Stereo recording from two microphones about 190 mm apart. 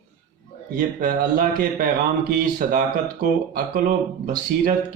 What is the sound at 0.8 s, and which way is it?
Speech, 45° right (ahead or behind).